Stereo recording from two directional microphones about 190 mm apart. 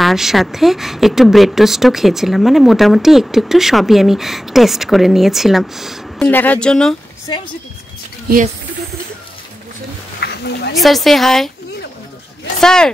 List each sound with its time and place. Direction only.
0.0 s speech: centre (ahead or behind)
10.2 s a sound: 60° left (ahead or behind)
10.8 s speech: centre (ahead or behind)
12.5 s speech: 5° left (ahead or behind)